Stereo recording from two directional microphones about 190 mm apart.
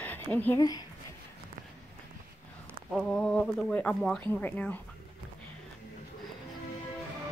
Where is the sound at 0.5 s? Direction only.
20° left (ahead or behind).